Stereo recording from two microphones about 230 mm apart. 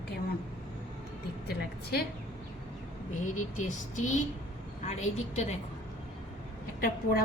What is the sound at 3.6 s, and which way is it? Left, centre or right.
A woman's voice, left.